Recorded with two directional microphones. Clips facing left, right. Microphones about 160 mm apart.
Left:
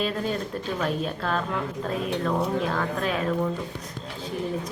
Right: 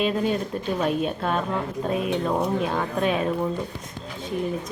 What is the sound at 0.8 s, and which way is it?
A woman's voice, 25° right (ahead or behind).